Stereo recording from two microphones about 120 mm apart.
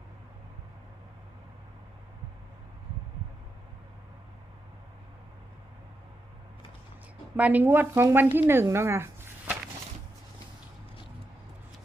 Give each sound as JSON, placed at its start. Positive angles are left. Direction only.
{"t": 7.3, "sound": "a woman's voice", "side_deg": -15}